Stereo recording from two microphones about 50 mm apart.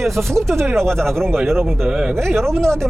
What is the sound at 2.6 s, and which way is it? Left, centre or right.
Speech, centre.